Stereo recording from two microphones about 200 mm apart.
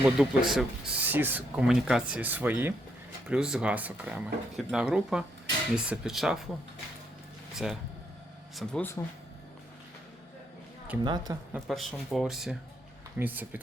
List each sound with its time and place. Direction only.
0.2 s speech: centre (ahead or behind)
7.5 s speech: centre (ahead or behind)
11.0 s a woman's voice: 20° right (ahead or behind)
11.5 s speech: centre (ahead or behind)